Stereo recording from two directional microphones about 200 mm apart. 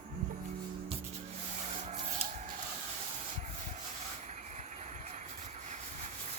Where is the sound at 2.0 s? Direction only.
35° right (ahead or behind).